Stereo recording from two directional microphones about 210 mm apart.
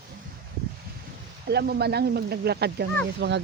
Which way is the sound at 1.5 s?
50° right (ahead or behind).